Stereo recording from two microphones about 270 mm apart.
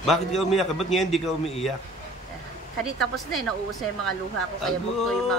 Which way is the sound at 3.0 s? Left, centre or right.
Centre.